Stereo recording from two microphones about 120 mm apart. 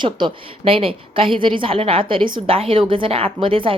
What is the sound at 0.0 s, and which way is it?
A woman's voice, 40° right (ahead or behind).